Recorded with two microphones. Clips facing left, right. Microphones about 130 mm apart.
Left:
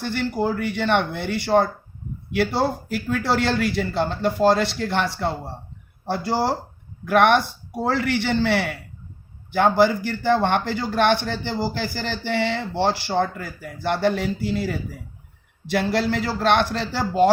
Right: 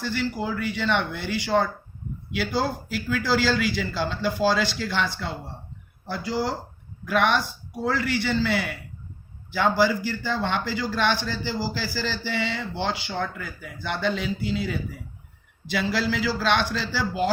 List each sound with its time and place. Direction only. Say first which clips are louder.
0.0 s a man's voice: left 4 dB; 65° left (ahead or behind)
6.1 s speech: left 5 dB; 70° left (ahead or behind)
9.5 s a man's voice: left 4 dB; 55° left (ahead or behind)